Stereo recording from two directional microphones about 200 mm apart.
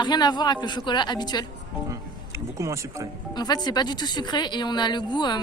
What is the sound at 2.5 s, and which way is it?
Speech, 15° right (ahead or behind).